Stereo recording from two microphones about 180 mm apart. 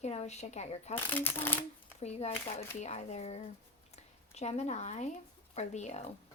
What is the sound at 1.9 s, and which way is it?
Speech, 35° left (ahead or behind).